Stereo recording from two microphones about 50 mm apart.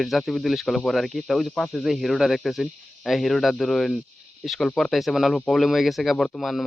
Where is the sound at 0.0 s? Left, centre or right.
Centre.